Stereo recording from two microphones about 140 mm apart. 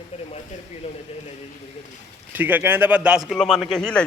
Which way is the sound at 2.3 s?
15° right (ahead or behind).